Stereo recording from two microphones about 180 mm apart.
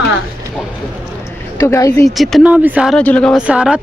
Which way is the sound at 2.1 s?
Centre (ahead or behind).